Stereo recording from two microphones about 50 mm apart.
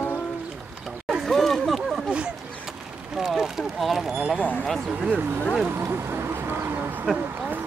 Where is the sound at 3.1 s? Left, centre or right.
Centre.